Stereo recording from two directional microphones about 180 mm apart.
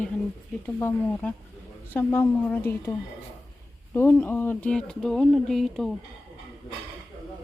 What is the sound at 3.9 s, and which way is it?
Speech, 10° left (ahead or behind).